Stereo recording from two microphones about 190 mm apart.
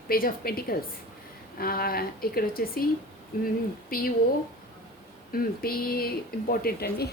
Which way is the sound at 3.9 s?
50° left (ahead or behind).